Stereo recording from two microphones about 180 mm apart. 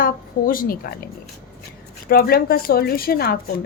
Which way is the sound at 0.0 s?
50° left (ahead or behind).